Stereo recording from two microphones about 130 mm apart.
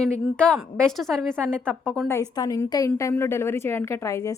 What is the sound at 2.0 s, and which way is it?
A woman's voice, 25° left (ahead or behind).